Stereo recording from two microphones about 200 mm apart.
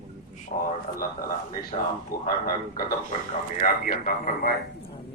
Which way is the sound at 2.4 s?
45° left (ahead or behind).